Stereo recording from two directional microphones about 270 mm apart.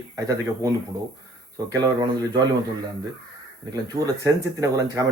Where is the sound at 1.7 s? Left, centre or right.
Centre.